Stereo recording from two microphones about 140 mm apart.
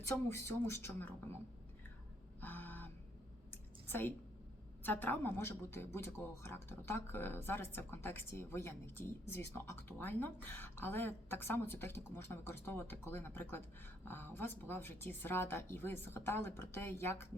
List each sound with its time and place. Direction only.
0.3 s speech: 20° left (ahead or behind)
2.4 s a sound: 10° left (ahead or behind)
3.8 s a woman's voice: 15° left (ahead or behind)